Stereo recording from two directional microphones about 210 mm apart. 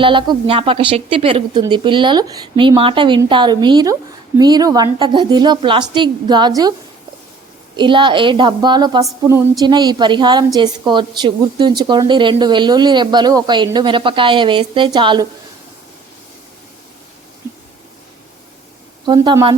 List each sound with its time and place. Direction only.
0.0 s a woman's voice: 25° right (ahead or behind)
7.8 s a woman's voice: 20° right (ahead or behind)
19.0 s a woman's voice: 20° right (ahead or behind)